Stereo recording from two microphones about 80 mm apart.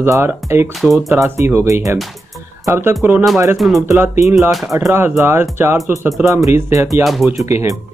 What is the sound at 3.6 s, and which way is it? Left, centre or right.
Speech, centre.